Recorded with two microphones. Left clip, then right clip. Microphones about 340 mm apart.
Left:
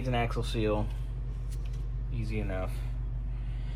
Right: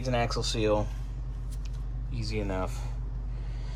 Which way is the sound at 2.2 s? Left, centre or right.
Centre.